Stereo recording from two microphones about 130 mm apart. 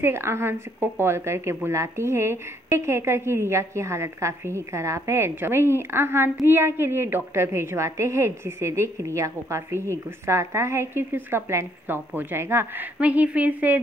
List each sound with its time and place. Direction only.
0.0 s a woman's voice: 20° right (ahead or behind)